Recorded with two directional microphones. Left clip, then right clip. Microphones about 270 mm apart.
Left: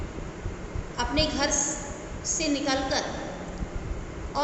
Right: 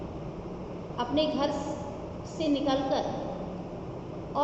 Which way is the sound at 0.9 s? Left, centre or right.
Left.